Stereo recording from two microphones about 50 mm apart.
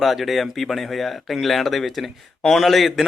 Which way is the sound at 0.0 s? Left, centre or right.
Centre.